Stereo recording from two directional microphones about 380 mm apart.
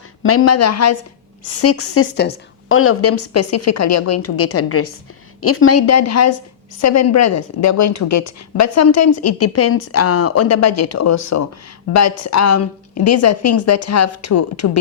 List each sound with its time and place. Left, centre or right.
0.2 s a woman's voice: left